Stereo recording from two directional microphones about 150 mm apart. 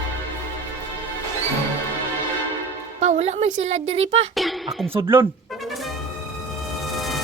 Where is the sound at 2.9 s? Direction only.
50° right (ahead or behind).